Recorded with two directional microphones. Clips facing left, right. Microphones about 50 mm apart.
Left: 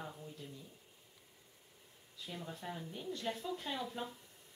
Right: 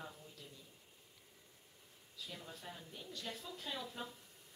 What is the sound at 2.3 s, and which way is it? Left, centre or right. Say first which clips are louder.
Speech: left 7 dB; centre.